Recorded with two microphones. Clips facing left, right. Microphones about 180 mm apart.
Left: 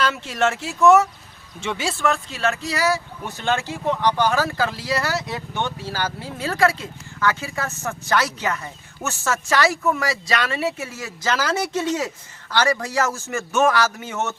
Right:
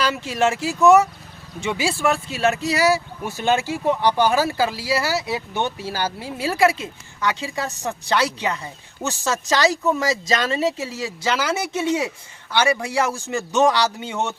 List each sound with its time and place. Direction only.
0.0 s speech: 5° right (ahead or behind)